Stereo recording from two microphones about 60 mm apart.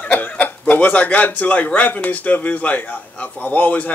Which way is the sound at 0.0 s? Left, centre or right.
Left.